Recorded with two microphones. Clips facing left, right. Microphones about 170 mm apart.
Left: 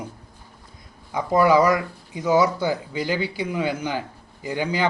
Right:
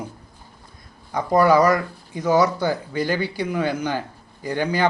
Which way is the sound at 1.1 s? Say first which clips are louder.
Right 1 dB; 15° left (ahead or behind).